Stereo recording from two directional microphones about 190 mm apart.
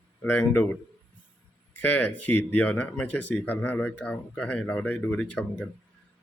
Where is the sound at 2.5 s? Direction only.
10° left (ahead or behind).